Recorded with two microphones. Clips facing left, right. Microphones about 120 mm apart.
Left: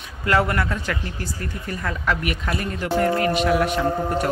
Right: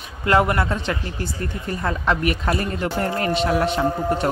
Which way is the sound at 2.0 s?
35° right (ahead or behind).